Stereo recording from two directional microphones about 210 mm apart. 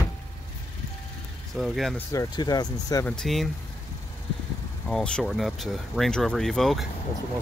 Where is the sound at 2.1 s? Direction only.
15° left (ahead or behind).